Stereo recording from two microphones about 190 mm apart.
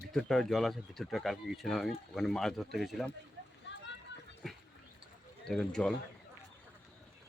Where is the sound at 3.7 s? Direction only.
70° left (ahead or behind).